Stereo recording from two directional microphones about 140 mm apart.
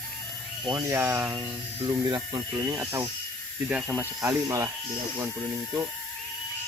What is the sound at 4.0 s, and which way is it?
Speech, 15° right (ahead or behind).